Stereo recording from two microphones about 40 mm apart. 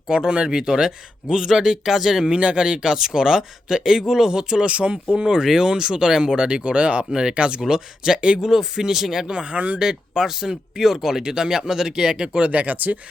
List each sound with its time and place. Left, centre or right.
0.1 s speech: right; by 2.2 s centre
2.2 s speech: right
8.4 s speech: centre
9.2 s speech: right